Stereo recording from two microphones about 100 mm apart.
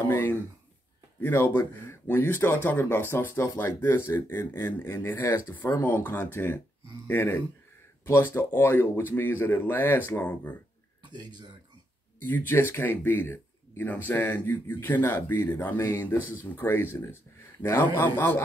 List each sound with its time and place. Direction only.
0.1 s speech: 20° left (ahead or behind)
11.1 s speech: 45° right (ahead or behind)
12.2 s speech: 20° left (ahead or behind)